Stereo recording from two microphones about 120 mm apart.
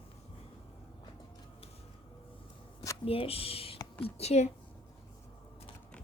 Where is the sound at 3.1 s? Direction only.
50° left (ahead or behind).